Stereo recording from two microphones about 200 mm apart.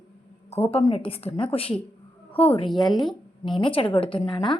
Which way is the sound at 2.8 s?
20° left (ahead or behind).